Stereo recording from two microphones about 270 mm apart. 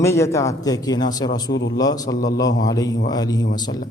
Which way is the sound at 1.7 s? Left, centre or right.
Centre.